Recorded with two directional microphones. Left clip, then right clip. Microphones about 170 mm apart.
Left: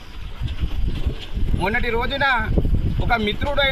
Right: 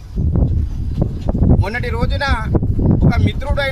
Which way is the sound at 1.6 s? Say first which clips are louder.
Left 1 dB; 15° right (ahead or behind).